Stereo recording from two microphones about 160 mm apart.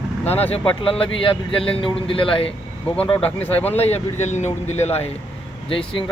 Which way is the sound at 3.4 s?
10° left (ahead or behind).